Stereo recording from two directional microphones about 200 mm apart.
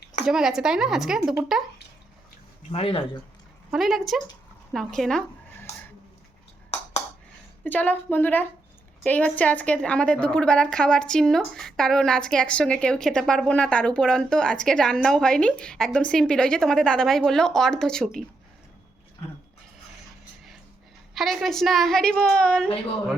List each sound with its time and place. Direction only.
0.3 s a woman's voice: 5° right (ahead or behind)
2.7 s speech: 30° left (ahead or behind)
3.7 s a woman's voice: centre (ahead or behind)
7.6 s a woman's voice: 10° left (ahead or behind)
21.2 s a woman's voice: centre (ahead or behind)